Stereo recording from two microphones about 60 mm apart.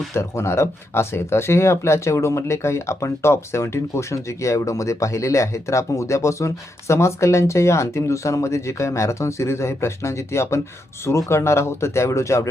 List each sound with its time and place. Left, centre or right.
0.1 s speech: left